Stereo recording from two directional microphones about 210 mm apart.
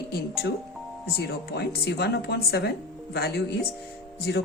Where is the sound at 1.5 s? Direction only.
50° left (ahead or behind).